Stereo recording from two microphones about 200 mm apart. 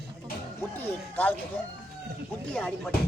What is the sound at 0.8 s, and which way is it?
Speech, 10° left (ahead or behind).